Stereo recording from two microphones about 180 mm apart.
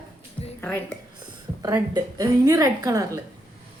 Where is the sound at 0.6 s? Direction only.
10° left (ahead or behind).